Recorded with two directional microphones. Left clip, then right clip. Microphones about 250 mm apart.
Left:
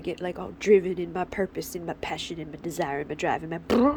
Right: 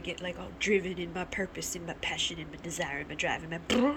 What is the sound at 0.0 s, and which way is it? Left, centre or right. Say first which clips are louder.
Speech: left 5 dB; centre.